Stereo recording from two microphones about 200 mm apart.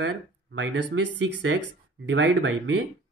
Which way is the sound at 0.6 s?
65° right (ahead or behind).